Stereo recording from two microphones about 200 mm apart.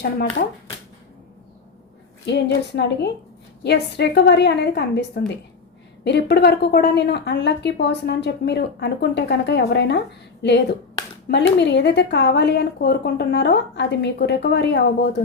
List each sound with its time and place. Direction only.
2.2 s a woman's voice: 60° left (ahead or behind)
11.3 s a woman's voice: 60° left (ahead or behind)